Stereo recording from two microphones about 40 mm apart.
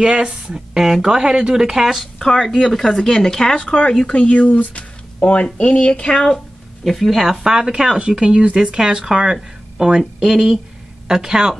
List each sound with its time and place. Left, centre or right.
0.0 s a woman's voice: centre
2.1 s speech: centre
3.5 s speech: left
6.2 s a sound: centre
6.9 s speech: centre
7.4 s a woman's voice: centre